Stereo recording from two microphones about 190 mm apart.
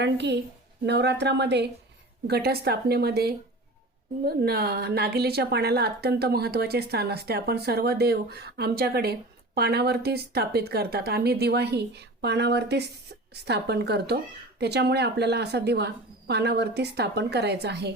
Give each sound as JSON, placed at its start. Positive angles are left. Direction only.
{"t": 0.0, "sound": "a woman's voice", "side_deg": -65}